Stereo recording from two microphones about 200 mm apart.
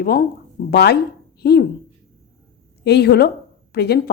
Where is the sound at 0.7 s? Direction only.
55° left (ahead or behind).